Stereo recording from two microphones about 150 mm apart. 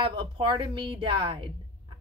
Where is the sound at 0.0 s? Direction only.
35° right (ahead or behind).